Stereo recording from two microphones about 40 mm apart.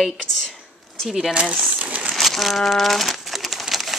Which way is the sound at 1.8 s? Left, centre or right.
Right.